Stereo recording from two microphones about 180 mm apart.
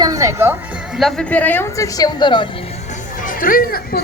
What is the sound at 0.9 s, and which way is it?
A woman's voice, centre (ahead or behind).